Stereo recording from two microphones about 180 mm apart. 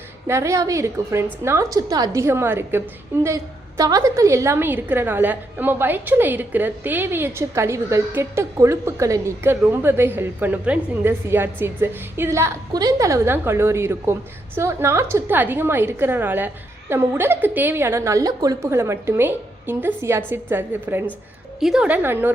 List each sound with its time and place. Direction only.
0.3 s a woman's voice: 15° right (ahead or behind)